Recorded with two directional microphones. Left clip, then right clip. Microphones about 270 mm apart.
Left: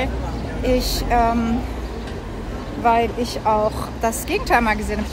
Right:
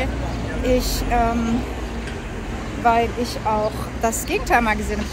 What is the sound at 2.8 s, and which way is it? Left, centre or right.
A woman's voice, centre.